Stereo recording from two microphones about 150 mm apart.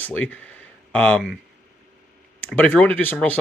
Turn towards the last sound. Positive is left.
turn(degrees=10)  # may be behind; listen again after turning